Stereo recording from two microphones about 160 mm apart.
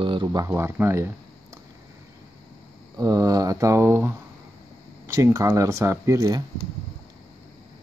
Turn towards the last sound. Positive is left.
turn(degrees=-20)  # may be behind; listen again after turning